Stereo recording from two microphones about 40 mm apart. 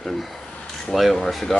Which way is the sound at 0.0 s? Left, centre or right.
Centre.